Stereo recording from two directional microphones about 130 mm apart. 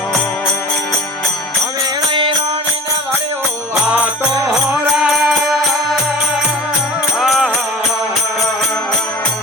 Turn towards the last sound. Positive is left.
turn(degrees=0)  # may be behind; listen again after turning